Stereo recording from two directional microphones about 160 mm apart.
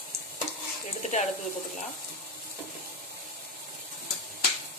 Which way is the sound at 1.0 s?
45° left (ahead or behind).